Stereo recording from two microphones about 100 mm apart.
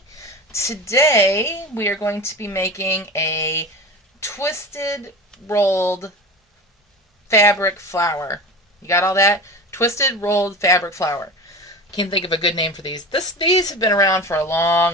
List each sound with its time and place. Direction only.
0.2 s a woman's voice: 30° left (ahead or behind)
7.3 s a woman's voice: 30° left (ahead or behind)
12.1 s a woman's voice: 55° left (ahead or behind); by 14.8 s 25° left (ahead or behind)